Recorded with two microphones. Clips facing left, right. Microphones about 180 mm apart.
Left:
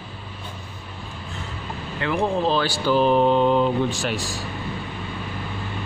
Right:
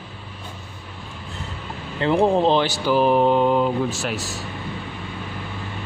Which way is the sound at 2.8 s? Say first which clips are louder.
Left 1 dB; 10° right (ahead or behind).